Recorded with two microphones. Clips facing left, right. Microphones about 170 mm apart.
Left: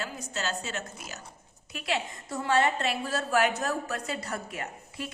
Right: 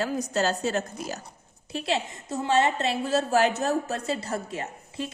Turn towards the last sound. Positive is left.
turn(degrees=-25)  # may be behind; listen again after turning